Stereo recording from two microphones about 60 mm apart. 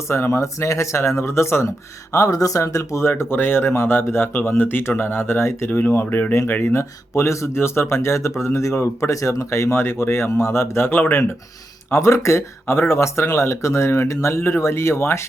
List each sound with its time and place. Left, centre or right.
0.1 s speech: left
2.1 s speech: left
3.1 s speech: left
11.9 s speech: left